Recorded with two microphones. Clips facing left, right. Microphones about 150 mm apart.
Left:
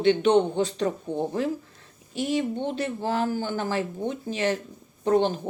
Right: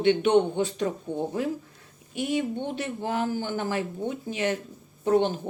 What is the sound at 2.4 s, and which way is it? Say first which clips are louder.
Speech: left 2 dB; 25° left (ahead or behind).